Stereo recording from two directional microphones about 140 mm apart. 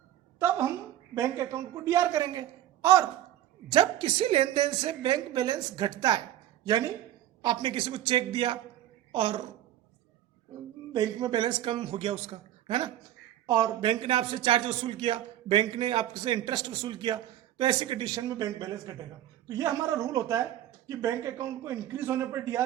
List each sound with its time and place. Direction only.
0.3 s a sound: 20° right (ahead or behind)
1.1 s a woman's voice: 20° right (ahead or behind)
3.7 s a man's voice: 35° right (ahead or behind)
10.9 s a man's voice: 30° right (ahead or behind)